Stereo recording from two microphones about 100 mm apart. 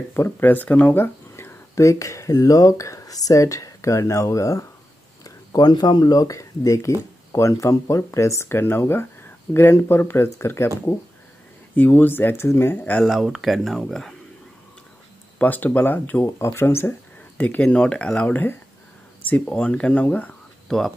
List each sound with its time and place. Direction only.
0.1 s speech: 20° left (ahead or behind)
13.0 s speech: 5° right (ahead or behind)
15.3 s speech: 15° left (ahead or behind)
20.6 s speech: 5° left (ahead or behind)